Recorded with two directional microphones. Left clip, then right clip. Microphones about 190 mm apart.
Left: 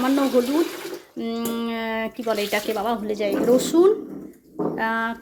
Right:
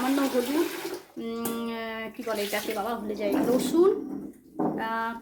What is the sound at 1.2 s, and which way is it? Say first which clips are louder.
Speech: left 6 dB; 30° left (ahead or behind).